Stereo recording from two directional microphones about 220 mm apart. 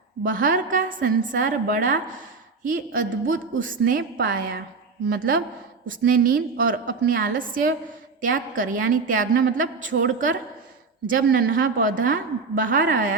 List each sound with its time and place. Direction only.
0.2 s a woman's voice: 40° right (ahead or behind)
5.0 s a woman's voice: 40° right (ahead or behind)